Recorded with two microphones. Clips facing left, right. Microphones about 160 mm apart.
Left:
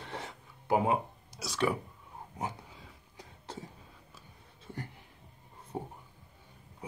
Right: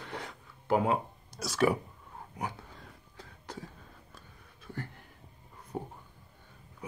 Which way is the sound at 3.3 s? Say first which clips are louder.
Even; 20° left (ahead or behind).